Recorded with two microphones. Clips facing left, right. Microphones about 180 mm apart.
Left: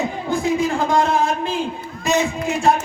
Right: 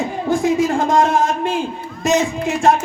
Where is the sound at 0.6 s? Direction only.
45° right (ahead or behind).